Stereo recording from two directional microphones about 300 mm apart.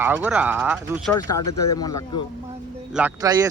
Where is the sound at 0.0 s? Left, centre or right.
Centre.